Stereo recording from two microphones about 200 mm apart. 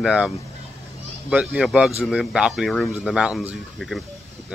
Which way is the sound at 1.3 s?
5° right (ahead or behind).